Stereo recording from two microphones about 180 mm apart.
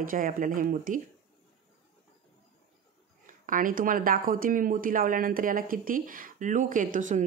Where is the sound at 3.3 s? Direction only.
50° right (ahead or behind).